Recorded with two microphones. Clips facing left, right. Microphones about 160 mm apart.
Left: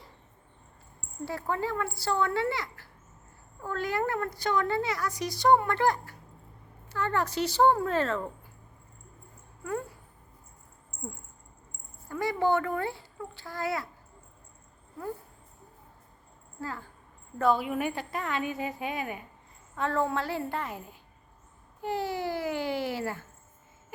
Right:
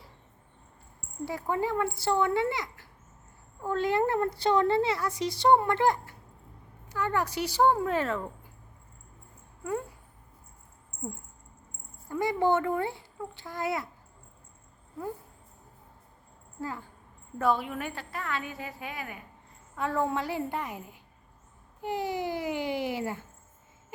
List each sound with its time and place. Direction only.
1.2 s a woman's voice: 15° right (ahead or behind)
6.8 s speech: 10° right (ahead or behind)
12.0 s a woman's voice: 20° right (ahead or behind)
16.6 s speech: 15° right (ahead or behind)
17.6 s a woman's voice: 10° left (ahead or behind)
19.7 s speech: 10° right (ahead or behind)